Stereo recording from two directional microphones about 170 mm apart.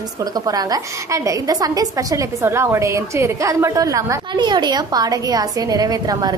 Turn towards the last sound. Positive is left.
turn(degrees=-20)  # may be behind; listen again after turning